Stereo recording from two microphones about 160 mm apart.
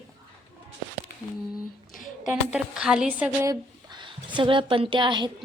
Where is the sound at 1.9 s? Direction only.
55° left (ahead or behind).